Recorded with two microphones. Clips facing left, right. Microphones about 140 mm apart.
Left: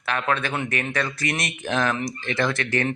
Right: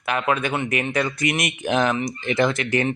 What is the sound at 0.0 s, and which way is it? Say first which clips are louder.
Speech: right 2 dB; 10° right (ahead or behind).